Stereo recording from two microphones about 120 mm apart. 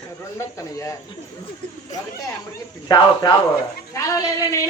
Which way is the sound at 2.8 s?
35° left (ahead or behind).